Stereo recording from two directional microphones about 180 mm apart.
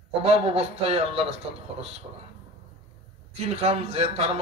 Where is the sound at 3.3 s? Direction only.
35° right (ahead or behind).